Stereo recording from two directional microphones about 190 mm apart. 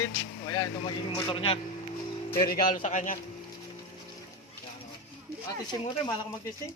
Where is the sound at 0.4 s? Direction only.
20° left (ahead or behind).